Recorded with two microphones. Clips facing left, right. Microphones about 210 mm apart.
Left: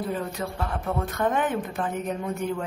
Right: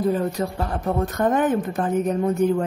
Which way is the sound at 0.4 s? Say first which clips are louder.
Right 5 dB; 40° right (ahead or behind).